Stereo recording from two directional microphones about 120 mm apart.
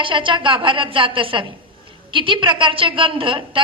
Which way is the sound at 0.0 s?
45° right (ahead or behind).